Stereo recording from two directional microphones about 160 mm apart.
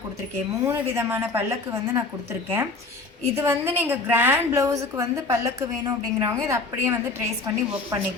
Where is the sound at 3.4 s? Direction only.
15° right (ahead or behind).